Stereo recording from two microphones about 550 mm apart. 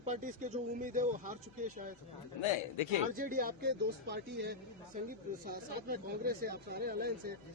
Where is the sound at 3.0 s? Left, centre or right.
Centre.